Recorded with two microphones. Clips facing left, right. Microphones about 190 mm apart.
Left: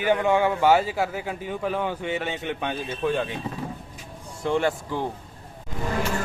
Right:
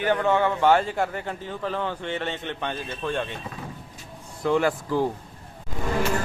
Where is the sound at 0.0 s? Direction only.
10° left (ahead or behind).